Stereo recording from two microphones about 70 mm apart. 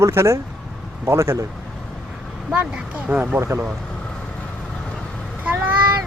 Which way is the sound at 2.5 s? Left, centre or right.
Centre.